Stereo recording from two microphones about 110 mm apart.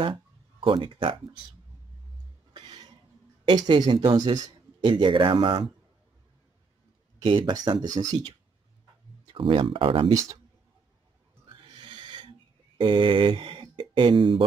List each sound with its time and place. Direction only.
0.0 s speech: 50° right (ahead or behind)
2.5 s music: 40° right (ahead or behind)
3.5 s speech: 45° right (ahead or behind)
7.2 s speech: 45° right (ahead or behind)
9.3 s speech: 50° right (ahead or behind)
10.1 s speech: 30° right (ahead or behind)
11.4 s a sound: 50° right (ahead or behind)
12.7 s speech: 50° right (ahead or behind)